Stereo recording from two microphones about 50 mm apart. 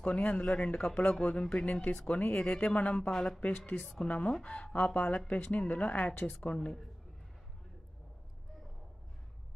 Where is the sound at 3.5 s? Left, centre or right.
Left.